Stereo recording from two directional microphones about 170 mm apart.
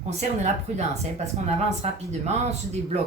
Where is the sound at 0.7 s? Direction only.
40° right (ahead or behind).